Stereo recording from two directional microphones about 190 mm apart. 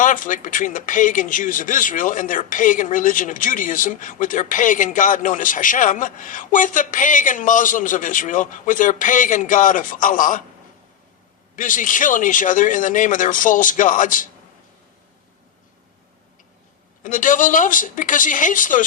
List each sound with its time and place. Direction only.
0.0 s speech: 45° left (ahead or behind)
11.5 s speech: 45° left (ahead or behind)
17.0 s speech: 45° left (ahead or behind)